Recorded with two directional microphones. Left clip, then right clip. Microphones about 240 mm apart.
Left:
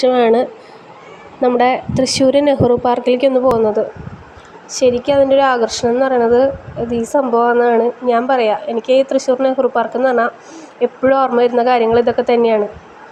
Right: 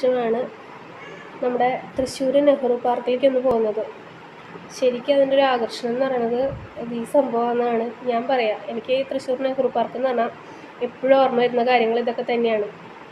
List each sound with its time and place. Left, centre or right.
0.0 s a woman's voice: left
4.7 s a woman's voice: left